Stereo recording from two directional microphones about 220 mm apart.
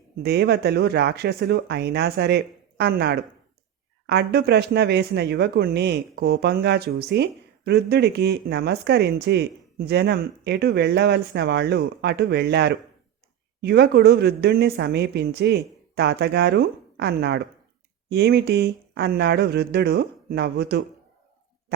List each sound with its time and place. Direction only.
0.2 s speech: 50° right (ahead or behind)